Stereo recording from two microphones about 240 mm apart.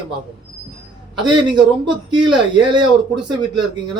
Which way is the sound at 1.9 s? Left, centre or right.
Centre.